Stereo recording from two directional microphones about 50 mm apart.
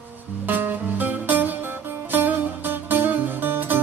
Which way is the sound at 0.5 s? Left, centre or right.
Right.